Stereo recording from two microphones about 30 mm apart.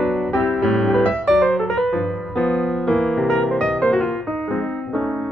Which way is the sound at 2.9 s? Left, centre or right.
Centre.